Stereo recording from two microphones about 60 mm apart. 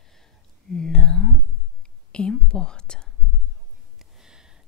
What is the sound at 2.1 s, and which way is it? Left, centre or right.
Speech, centre.